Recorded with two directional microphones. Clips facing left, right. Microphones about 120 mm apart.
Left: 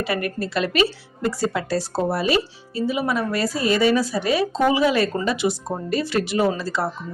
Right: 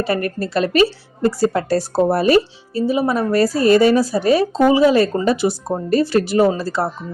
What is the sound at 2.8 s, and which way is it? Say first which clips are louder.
A woman's voice: right 5 dB; 35° right (ahead or behind).